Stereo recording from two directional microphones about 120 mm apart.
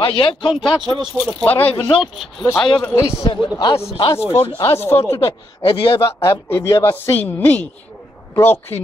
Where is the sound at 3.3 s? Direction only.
45° left (ahead or behind).